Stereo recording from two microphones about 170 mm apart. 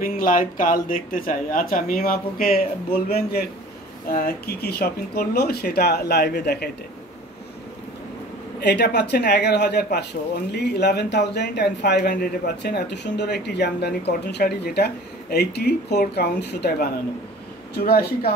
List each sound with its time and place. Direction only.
0.2 s speech: 50° left (ahead or behind); by 6.7 s 70° left (ahead or behind)
8.5 s speech: 75° left (ahead or behind)